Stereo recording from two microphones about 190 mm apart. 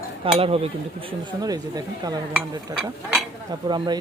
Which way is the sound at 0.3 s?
30° right (ahead or behind).